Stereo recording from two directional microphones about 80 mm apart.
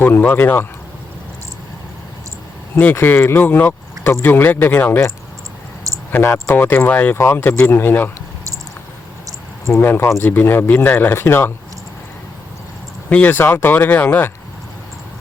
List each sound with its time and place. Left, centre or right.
0.0 s speech: left
2.7 s speech: left
6.1 s speech: left
9.7 s speech: left
13.1 s speech: left